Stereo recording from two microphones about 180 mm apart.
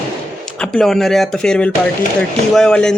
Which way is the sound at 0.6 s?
5° left (ahead or behind).